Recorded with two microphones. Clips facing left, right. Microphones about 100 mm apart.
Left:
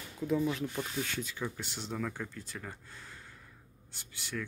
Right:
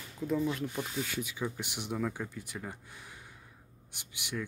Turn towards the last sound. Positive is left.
turn(degrees=-15)  # may be behind; listen again after turning